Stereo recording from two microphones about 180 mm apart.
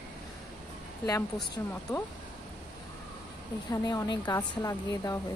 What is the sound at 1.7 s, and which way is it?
Speech, 15° left (ahead or behind).